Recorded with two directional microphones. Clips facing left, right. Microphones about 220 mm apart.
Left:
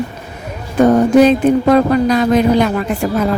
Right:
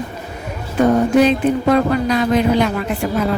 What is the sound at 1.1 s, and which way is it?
Speech, 45° left (ahead or behind).